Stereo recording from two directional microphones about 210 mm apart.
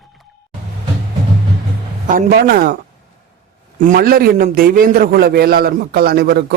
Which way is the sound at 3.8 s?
40° right (ahead or behind).